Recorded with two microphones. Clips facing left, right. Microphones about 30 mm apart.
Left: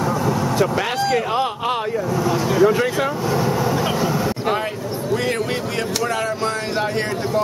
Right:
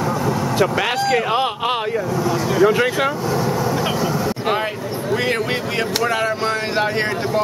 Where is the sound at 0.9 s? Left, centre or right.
Centre.